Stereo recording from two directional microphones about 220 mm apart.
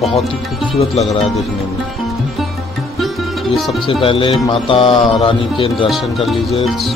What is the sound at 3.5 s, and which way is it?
Speech, centre (ahead or behind).